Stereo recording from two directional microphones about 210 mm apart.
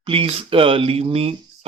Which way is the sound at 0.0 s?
25° right (ahead or behind).